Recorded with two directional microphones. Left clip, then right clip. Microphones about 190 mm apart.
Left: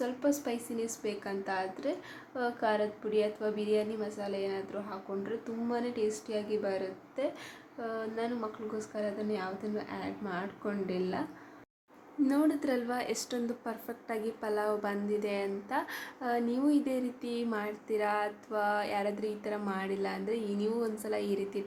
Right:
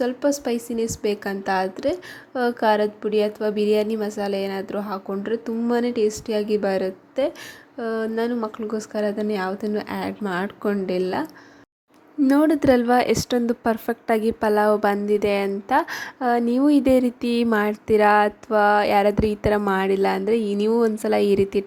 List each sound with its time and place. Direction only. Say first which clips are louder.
0.0 s a woman's voice: right 10 dB; 40° right (ahead or behind)
12.3 s a woman's voice: right 14 dB; 45° right (ahead or behind)